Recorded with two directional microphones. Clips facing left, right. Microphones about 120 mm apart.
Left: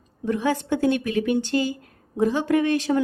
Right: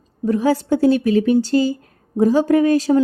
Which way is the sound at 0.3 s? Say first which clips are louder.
Right 6 dB; 35° right (ahead or behind).